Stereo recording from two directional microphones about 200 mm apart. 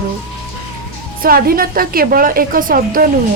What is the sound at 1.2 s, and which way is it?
A woman's voice, 45° right (ahead or behind).